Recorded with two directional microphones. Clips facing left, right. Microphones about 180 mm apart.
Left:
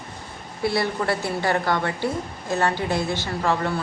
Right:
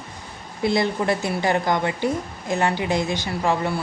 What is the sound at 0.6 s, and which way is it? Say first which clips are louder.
A woman's voice: right 2 dB; 20° right (ahead or behind).